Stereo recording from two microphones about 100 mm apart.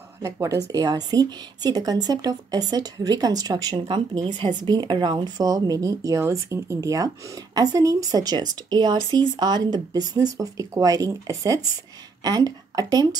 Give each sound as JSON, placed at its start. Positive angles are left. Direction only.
{"t": 0.2, "sound": "a woman's voice", "side_deg": -30}